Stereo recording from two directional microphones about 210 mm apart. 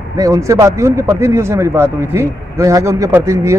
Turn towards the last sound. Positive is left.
turn(degrees=-15)  # may be behind; listen again after turning